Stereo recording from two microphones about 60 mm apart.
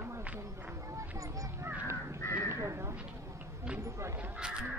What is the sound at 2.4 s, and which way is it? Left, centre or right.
Crow, right.